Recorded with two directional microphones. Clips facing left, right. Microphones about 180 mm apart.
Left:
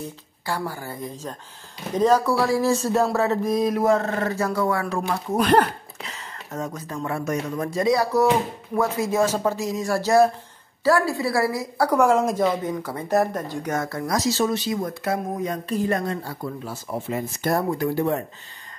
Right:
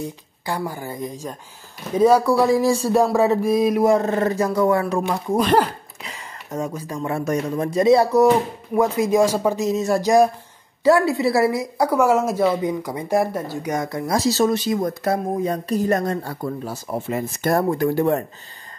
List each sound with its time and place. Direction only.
0.0 s speech: 15° right (ahead or behind)
5.4 s a sound: 10° right (ahead or behind)
7.1 s speech: 25° right (ahead or behind)
12.0 s speech: 5° right (ahead or behind)
14.1 s speech: 30° right (ahead or behind)
14.4 s speech: 50° right (ahead or behind)